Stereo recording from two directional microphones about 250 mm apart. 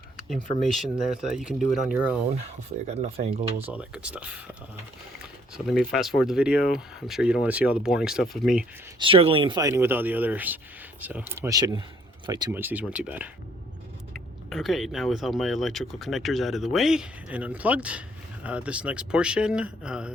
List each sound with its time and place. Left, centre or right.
0.7 s speech: centre
2.3 s speech: right
3.7 s speech: centre
5.5 s speech: centre
9.0 s speech: right; by 13.3 s centre
14.5 s speech: centre